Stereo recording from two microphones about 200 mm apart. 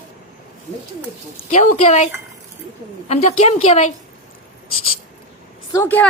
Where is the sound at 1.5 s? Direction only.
35° left (ahead or behind).